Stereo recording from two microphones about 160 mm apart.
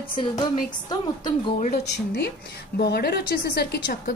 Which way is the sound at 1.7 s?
90° left.